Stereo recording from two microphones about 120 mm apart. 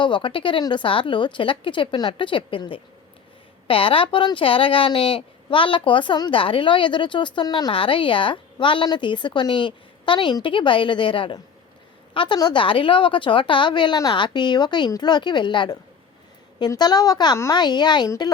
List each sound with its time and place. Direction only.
0.0 s a woman's voice: 45° left (ahead or behind)